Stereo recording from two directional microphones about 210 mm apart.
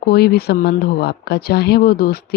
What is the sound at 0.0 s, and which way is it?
Speech, 50° left (ahead or behind).